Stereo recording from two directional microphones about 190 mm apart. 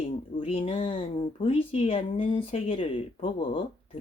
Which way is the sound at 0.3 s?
30° left (ahead or behind).